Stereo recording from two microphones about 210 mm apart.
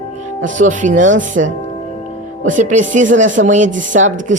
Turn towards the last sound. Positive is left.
turn(degrees=-35)  # may be behind; listen again after turning